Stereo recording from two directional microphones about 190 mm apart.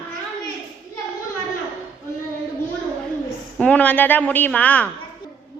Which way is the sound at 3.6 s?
5° left (ahead or behind).